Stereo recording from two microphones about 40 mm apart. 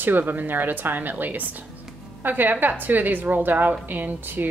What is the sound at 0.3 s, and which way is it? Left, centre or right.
A woman's voice, right.